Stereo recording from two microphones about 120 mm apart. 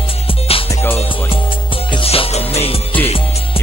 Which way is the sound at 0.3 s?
50° left (ahead or behind).